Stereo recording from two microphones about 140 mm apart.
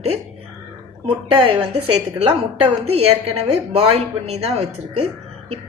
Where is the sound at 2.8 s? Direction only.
45° right (ahead or behind).